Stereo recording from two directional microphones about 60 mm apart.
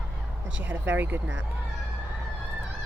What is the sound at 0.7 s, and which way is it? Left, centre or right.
Speech, right.